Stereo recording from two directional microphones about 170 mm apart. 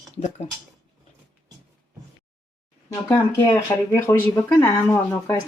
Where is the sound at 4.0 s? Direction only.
15° left (ahead or behind).